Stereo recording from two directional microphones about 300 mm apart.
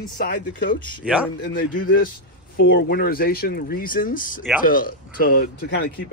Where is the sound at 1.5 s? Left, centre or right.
Left.